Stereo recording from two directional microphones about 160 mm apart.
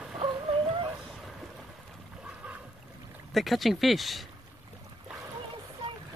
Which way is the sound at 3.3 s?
Centre (ahead or behind).